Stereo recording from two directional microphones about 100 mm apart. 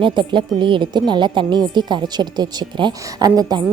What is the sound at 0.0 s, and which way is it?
A woman's voice, 50° right (ahead or behind).